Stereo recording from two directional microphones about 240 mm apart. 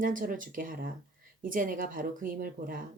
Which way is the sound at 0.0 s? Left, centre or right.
Right.